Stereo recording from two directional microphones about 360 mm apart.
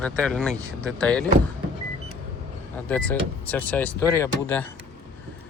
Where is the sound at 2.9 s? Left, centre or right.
Centre.